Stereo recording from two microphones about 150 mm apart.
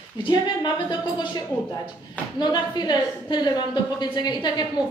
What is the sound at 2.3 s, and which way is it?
A woman's voice, 30° left (ahead or behind).